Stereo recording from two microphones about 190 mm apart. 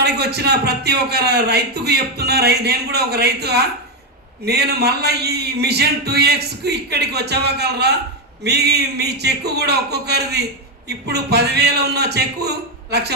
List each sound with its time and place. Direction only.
0.0 s a man's voice: 60° right (ahead or behind)